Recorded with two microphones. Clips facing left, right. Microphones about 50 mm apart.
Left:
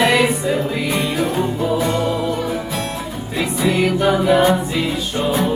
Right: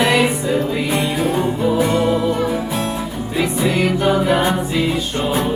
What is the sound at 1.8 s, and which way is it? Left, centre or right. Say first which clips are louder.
Music: right 2 dB; centre.